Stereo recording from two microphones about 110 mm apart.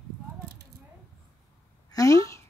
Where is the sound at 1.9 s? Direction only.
30° left (ahead or behind).